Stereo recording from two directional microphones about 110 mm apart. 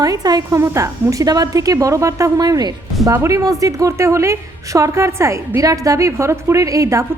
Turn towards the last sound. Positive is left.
turn(degrees=-30)  # may be behind; listen again after turning